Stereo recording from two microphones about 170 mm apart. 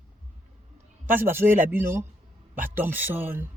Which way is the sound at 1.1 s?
15° right (ahead or behind).